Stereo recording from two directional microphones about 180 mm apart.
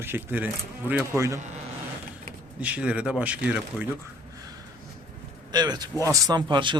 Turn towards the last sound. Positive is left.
turn(degrees=-25)  # may be behind; listen again after turning